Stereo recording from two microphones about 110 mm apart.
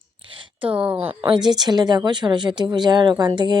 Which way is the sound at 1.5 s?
40° right (ahead or behind).